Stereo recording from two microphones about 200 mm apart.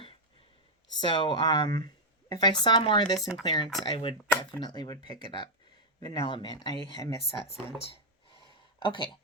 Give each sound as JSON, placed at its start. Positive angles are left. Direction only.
{"t": 1.0, "sound": "speech", "side_deg": 25}
{"t": 3.2, "sound": "speech", "side_deg": 0}
{"t": 3.4, "sound": "speech", "side_deg": 20}
{"t": 8.8, "sound": "speech", "side_deg": 25}